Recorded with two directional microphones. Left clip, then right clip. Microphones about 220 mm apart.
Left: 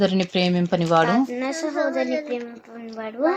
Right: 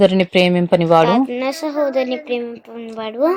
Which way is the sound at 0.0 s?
20° right (ahead or behind).